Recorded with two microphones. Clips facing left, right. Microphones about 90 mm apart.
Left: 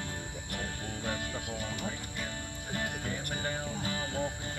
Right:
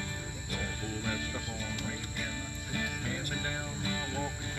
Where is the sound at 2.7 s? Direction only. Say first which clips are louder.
Left 1 dB; 60° left (ahead or behind).